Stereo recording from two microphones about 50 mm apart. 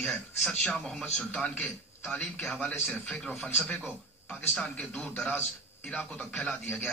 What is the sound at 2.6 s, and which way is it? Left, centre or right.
Speech, left.